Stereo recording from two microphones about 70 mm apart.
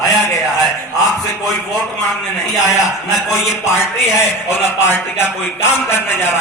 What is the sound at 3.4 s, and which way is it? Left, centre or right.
A man's voice, left.